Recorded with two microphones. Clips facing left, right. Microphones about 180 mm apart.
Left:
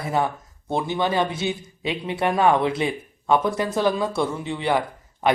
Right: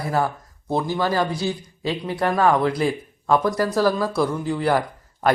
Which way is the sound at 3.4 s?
20° left (ahead or behind).